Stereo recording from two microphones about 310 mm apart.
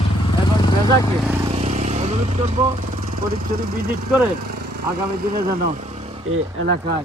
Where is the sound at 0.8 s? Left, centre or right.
Centre.